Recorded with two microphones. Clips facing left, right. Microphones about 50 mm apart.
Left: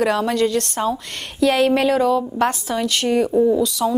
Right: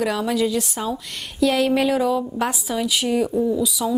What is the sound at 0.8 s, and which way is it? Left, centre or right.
A woman's voice, centre.